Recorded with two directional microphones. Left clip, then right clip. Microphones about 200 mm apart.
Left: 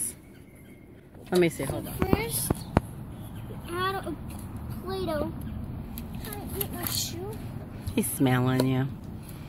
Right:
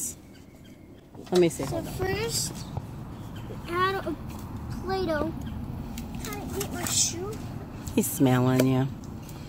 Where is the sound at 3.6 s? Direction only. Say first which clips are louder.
Right 4 dB; 15° right (ahead or behind).